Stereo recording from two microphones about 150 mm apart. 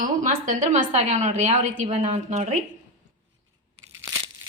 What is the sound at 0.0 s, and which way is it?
A woman's voice, 55° right (ahead or behind).